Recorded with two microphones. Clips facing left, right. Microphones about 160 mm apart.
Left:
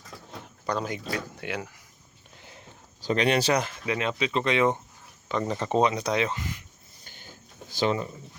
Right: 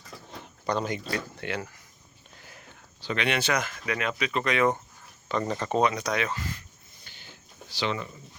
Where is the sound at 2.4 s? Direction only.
25° left (ahead or behind).